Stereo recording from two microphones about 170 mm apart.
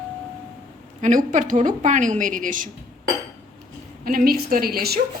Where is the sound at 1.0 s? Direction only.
45° right (ahead or behind).